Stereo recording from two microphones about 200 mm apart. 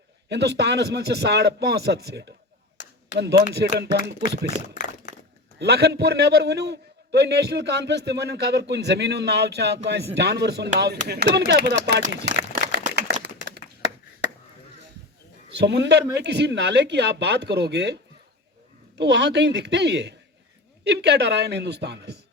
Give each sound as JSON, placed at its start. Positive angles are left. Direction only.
{"t": 0.3, "sound": "a man's voice", "side_deg": -55}
{"t": 3.4, "sound": "a man's voice", "side_deg": -55}
{"t": 5.5, "sound": "a man's voice", "side_deg": -55}
{"t": 15.4, "sound": "a man's voice", "side_deg": -55}
{"t": 18.9, "sound": "a man's voice", "side_deg": -60}